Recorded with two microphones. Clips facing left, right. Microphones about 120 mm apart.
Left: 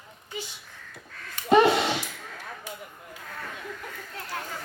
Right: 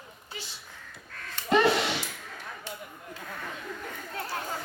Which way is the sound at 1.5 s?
25° left (ahead or behind).